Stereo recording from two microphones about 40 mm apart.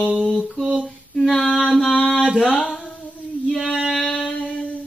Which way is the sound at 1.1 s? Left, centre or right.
Centre.